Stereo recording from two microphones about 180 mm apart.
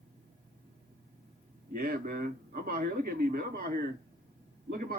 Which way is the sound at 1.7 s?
55° right (ahead or behind).